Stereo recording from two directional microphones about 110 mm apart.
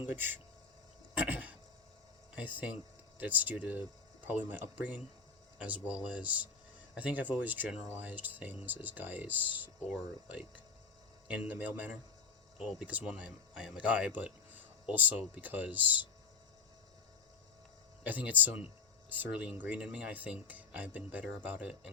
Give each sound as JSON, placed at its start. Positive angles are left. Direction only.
{"t": 0.0, "sound": "speech", "side_deg": -20}
{"t": 1.3, "sound": "a sound", "side_deg": -10}
{"t": 2.3, "sound": "speech", "side_deg": -15}
{"t": 18.0, "sound": "speech", "side_deg": -15}